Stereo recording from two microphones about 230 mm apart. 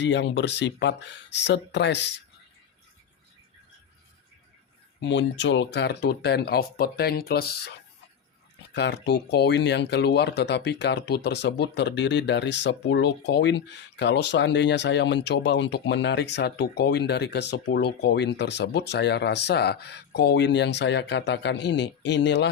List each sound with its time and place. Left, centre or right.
0.0 s speech: left
4.9 s speech: left
8.7 s speech: left